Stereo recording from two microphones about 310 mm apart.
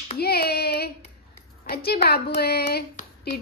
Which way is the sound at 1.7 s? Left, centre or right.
Left.